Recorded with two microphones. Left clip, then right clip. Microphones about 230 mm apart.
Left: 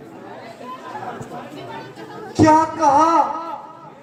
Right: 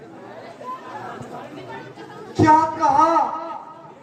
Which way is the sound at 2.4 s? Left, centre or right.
Left.